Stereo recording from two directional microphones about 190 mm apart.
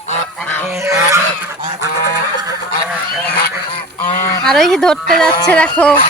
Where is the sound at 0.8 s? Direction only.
15° right (ahead or behind).